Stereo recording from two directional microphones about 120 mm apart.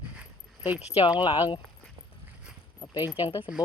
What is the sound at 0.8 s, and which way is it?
Speech, 65° left (ahead or behind).